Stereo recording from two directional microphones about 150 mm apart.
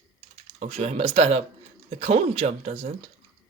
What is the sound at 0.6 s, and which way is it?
Speech, 50° right (ahead or behind).